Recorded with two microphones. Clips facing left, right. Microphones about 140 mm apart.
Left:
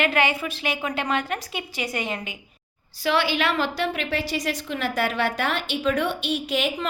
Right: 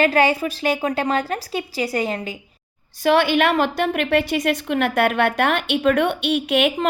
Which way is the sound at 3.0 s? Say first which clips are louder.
Right 6 dB; 50° right (ahead or behind).